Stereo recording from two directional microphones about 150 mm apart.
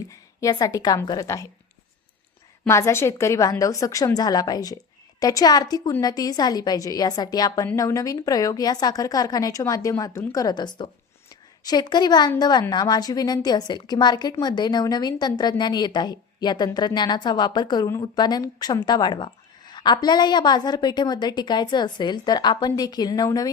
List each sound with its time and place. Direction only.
0.1 s speech: 20° left (ahead or behind)
2.6 s a woman's voice: 20° left (ahead or behind)